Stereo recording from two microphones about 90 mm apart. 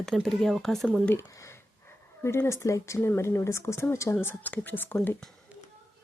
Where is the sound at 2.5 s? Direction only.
35° left (ahead or behind).